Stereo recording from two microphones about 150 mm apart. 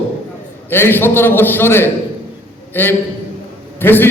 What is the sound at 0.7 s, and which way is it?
A man's voice, 15° left (ahead or behind).